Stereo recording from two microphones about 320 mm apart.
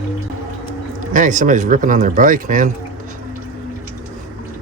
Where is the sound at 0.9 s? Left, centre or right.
Right.